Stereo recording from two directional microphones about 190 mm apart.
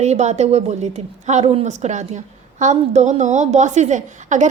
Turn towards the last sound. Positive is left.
turn(degrees=-40)  # may be behind; listen again after turning